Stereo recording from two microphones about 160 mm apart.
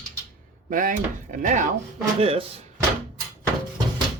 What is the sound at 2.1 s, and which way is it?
Speech, 35° right (ahead or behind).